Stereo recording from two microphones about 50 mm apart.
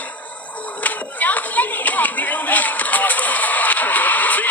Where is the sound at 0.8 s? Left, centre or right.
Left.